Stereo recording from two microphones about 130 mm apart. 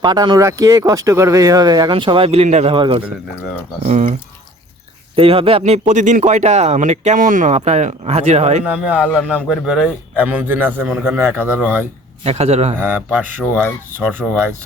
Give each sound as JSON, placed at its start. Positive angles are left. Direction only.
{"t": 0.0, "sound": "speech", "side_deg": -35}
{"t": 2.7, "sound": "speech", "side_deg": -35}
{"t": 5.1, "sound": "speech", "side_deg": -45}
{"t": 7.5, "sound": "speech", "side_deg": -60}
{"t": 8.6, "sound": "speech", "side_deg": -10}
{"t": 12.2, "sound": "a man's voice", "side_deg": -55}
{"t": 12.8, "sound": "speech", "side_deg": -10}